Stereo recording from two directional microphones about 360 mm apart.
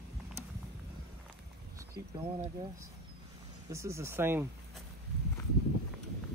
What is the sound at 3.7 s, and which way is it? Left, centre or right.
Speech, centre.